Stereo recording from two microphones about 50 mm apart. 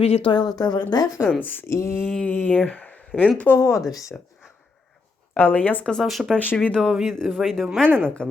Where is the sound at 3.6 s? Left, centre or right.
Left.